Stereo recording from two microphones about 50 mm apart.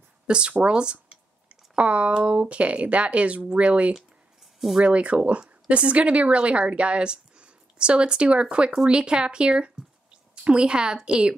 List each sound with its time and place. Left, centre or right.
0.3 s a woman's voice: right